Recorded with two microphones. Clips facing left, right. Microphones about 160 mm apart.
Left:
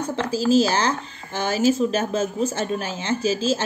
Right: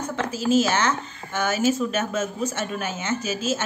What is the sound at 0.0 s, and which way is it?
Speech, 30° left (ahead or behind).